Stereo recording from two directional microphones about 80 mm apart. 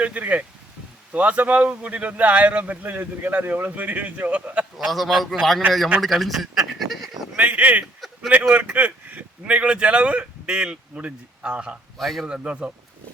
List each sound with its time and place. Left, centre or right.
0.0 s speech: centre
4.9 s a man's voice: centre
7.3 s speech: centre
11.9 s a man's voice: centre
12.3 s speech: centre